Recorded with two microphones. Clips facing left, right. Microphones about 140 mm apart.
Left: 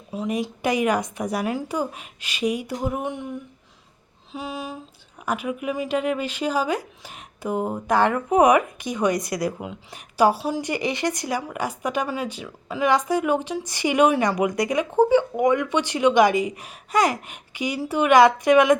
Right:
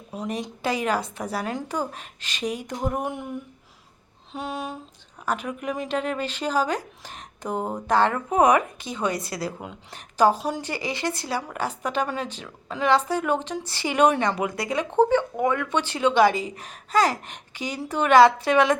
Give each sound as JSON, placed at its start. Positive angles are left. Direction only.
{"t": 0.1, "sound": "speech", "side_deg": 5}
{"t": 4.3, "sound": "a sound", "side_deg": 0}
{"t": 5.2, "sound": "speech", "side_deg": 10}
{"t": 10.6, "sound": "speech", "side_deg": 20}